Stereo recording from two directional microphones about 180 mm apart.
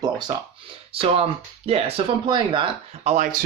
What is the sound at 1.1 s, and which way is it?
Speech, 35° right (ahead or behind).